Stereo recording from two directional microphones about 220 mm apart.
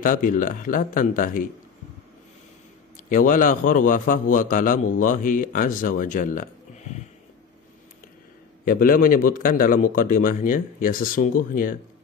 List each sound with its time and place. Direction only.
0.0 s a man's voice: 40° left (ahead or behind)
3.1 s a man's voice: 35° left (ahead or behind)
8.6 s a man's voice: 40° left (ahead or behind)